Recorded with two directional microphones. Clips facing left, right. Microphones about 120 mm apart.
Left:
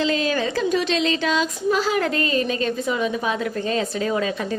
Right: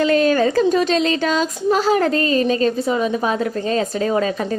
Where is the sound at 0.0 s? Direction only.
50° right (ahead or behind).